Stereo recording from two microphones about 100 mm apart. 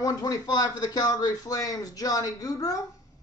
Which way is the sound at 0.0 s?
35° left (ahead or behind).